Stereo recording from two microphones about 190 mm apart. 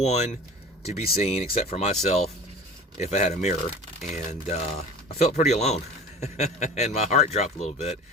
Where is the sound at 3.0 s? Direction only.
35° left (ahead or behind).